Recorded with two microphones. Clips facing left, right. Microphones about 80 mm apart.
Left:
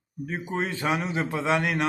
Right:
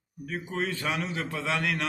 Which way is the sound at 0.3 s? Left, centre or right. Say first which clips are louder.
Left 2 dB; left.